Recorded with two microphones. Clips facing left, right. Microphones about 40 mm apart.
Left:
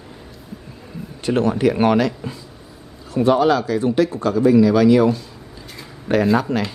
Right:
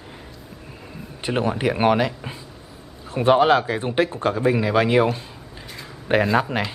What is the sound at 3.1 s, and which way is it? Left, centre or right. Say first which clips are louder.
Speech: even; right.